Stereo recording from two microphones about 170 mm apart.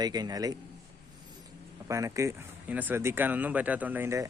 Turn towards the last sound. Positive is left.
turn(degrees=-15)  # may be behind; listen again after turning